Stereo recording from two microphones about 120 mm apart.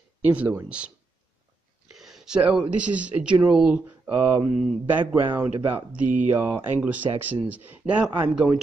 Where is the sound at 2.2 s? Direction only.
10° right (ahead or behind).